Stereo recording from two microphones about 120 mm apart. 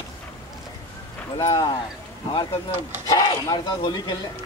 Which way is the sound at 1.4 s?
35° left (ahead or behind).